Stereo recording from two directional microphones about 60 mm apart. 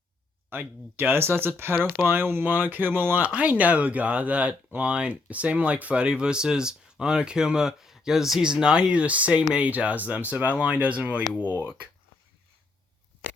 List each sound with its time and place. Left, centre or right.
0.5 s speech: right
3.2 s speech: right
11.3 s speech: left